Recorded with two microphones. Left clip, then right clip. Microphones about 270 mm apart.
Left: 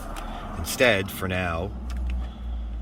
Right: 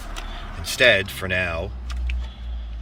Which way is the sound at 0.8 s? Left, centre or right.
Centre.